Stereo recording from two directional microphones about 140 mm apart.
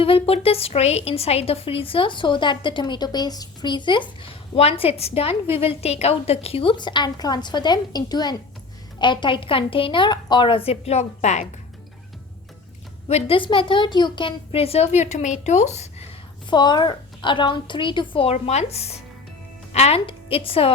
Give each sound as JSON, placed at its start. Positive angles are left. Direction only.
{"t": 0.0, "sound": "a woman's voice", "side_deg": 40}
{"t": 13.1, "sound": "a woman's voice", "side_deg": 45}
{"t": 16.5, "sound": "a woman's voice", "side_deg": 30}